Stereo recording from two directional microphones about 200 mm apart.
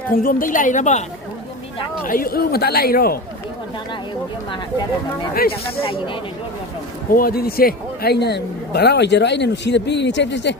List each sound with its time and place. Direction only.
0.2 s a woman's voice: 45° left (ahead or behind)
2.0 s speech: 45° left (ahead or behind)
5.3 s speech: 50° left (ahead or behind)
5.8 s speech: 25° left (ahead or behind)
7.1 s a man's voice: 45° left (ahead or behind)